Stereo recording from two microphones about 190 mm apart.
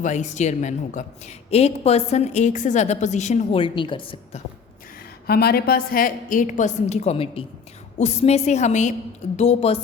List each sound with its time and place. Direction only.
0.0 s a woman's voice: 40° left (ahead or behind)
5.2 s a woman's voice: 55° left (ahead or behind); by 9.7 s 30° left (ahead or behind)